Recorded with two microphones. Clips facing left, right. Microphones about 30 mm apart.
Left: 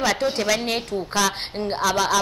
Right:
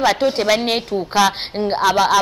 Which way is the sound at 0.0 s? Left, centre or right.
Right.